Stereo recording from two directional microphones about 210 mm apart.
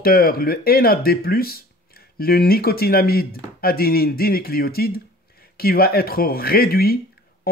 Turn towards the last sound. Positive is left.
turn(degrees=45)  # may be behind; listen again after turning